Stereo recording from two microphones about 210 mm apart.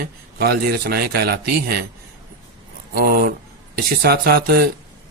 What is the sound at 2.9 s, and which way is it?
Speech, 45° right (ahead or behind).